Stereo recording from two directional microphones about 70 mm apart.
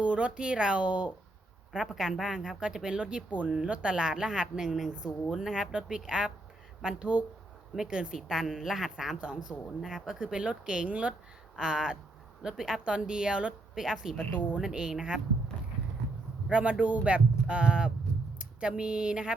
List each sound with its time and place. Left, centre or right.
0.0 s speech: centre
14.2 s speech: left
14.6 s speech: centre
16.5 s speech: centre